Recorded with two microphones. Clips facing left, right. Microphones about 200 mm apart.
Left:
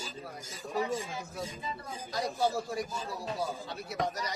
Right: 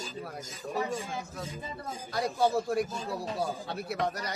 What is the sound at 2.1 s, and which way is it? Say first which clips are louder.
Speech: right 3 dB; 60° right (ahead or behind).